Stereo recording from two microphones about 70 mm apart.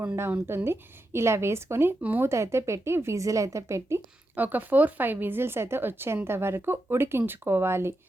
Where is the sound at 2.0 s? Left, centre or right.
Right.